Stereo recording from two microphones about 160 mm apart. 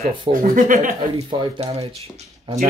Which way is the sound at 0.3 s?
60° right (ahead or behind).